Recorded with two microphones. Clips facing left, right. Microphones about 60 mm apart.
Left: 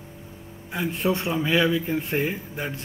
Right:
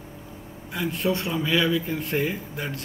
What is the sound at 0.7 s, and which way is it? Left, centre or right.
Speech, centre.